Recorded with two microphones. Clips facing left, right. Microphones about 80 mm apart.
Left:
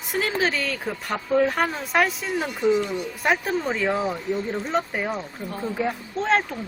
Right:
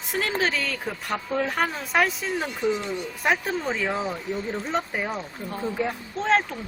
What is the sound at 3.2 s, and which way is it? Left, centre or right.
Speech, centre.